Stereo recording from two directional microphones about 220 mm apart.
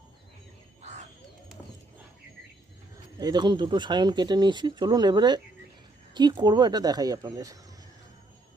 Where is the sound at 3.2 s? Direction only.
20° right (ahead or behind).